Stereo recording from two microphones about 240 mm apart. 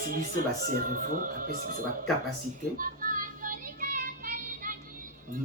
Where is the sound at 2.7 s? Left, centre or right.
Right.